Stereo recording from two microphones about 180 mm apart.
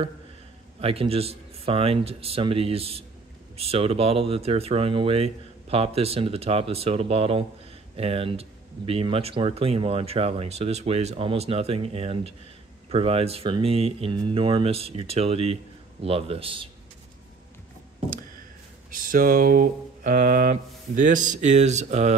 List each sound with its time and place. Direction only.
0.7 s speech: 35° right (ahead or behind)
18.9 s speech: 50° right (ahead or behind)